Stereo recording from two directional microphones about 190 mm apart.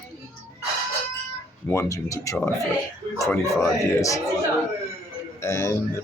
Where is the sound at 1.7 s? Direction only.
15° left (ahead or behind).